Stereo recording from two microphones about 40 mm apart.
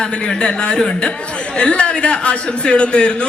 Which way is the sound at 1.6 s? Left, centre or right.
Left.